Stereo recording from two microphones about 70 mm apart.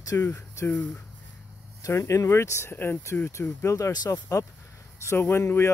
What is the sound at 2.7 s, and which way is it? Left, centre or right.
Speech, left.